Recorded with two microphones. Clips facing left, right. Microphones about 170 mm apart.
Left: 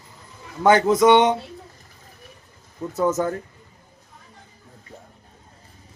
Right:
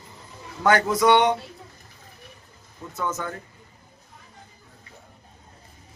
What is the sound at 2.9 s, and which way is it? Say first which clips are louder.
Speech: left 8 dB; 40° left (ahead or behind).